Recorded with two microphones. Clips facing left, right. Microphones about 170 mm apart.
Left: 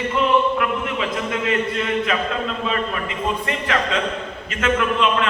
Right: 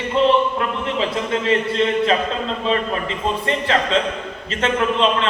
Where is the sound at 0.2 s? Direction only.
30° right (ahead or behind).